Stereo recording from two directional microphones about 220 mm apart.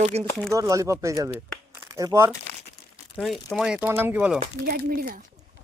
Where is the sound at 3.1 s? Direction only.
Centre (ahead or behind).